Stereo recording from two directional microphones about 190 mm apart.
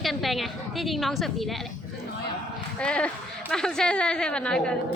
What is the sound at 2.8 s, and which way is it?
A woman's voice, 5° left (ahead or behind).